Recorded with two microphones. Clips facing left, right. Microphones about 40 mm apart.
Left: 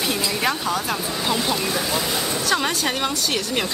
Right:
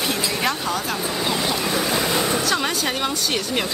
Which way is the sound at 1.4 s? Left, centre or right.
Centre.